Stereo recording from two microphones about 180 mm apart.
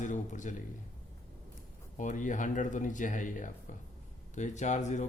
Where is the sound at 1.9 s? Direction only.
45° left (ahead or behind).